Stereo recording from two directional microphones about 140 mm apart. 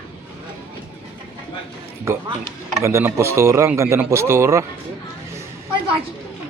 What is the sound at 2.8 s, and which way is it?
A man's voice, 20° right (ahead or behind).